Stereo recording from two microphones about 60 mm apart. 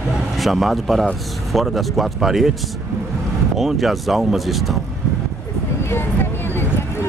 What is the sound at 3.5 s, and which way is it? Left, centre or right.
Speech, centre.